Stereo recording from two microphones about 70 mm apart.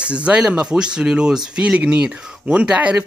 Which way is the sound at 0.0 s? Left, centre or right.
Centre.